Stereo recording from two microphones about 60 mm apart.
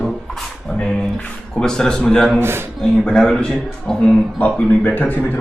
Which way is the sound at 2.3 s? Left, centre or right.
Right.